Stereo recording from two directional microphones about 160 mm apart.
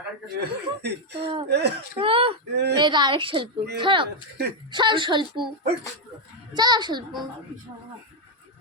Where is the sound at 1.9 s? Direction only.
35° right (ahead or behind).